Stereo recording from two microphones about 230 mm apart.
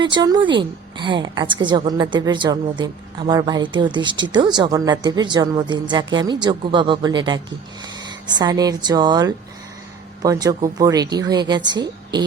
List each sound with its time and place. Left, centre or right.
0.0 s a woman's voice: centre